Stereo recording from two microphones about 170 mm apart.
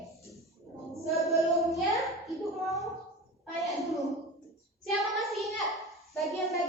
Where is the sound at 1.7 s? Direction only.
Centre (ahead or behind).